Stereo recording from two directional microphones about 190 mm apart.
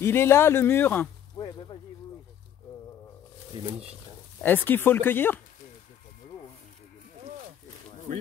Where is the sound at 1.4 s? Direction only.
30° left (ahead or behind).